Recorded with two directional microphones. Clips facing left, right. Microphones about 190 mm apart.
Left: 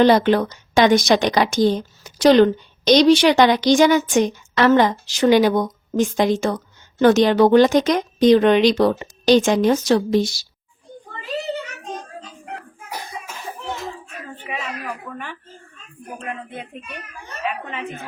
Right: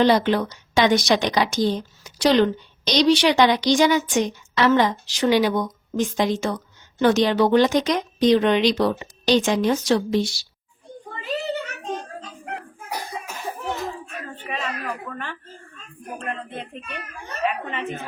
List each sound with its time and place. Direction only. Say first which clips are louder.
0.0 s a woman's voice: left 4 dB; 50° left (ahead or behind)
14.3 s speech: even; 10° left (ahead or behind)